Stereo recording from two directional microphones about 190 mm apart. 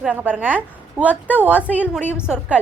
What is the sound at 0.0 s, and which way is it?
A woman's voice, 10° right (ahead or behind).